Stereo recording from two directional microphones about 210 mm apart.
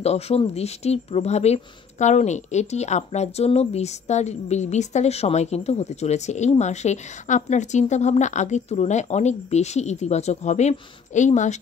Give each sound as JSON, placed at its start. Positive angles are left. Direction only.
{"t": 0.0, "sound": "speech", "side_deg": 30}